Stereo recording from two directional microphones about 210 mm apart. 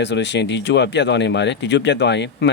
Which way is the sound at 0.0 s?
55° left (ahead or behind).